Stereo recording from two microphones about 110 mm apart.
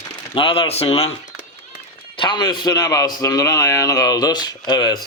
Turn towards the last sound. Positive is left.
turn(degrees=35)  # may be behind; listen again after turning